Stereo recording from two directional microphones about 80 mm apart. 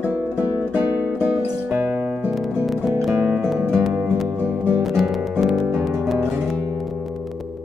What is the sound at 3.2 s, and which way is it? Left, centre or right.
Music, centre.